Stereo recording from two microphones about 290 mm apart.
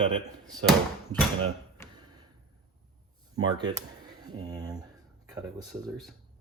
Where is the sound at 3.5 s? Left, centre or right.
Centre.